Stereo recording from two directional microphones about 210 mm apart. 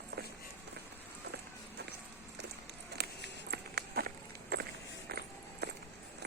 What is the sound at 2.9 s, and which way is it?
Walk, 50° right (ahead or behind).